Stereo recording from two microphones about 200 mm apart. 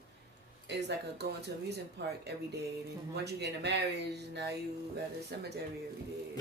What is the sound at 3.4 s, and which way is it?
Speech, 60° right (ahead or behind).